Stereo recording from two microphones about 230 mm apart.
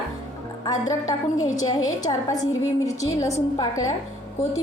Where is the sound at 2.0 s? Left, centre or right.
Centre.